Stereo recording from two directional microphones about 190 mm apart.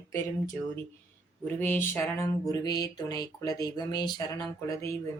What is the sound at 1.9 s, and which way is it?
Speech, 15° left (ahead or behind).